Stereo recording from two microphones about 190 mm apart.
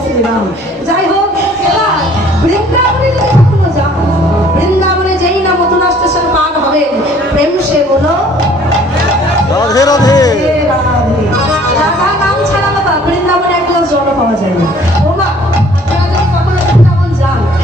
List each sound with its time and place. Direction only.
9.6 s music: 20° left (ahead or behind)